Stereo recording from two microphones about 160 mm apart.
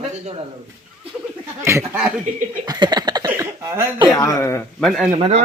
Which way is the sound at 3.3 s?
15° right (ahead or behind).